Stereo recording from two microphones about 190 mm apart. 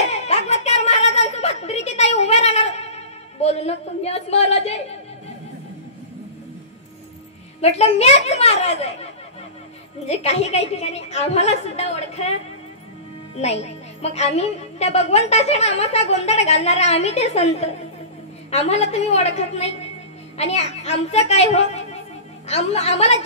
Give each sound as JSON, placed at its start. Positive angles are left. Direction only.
{"t": 0.1, "sound": "a sound", "side_deg": 35}
{"t": 7.6, "sound": "a woman's voice", "side_deg": 35}
{"t": 10.0, "sound": "a woman's voice", "side_deg": 35}
{"t": 13.4, "sound": "a woman's voice", "side_deg": 35}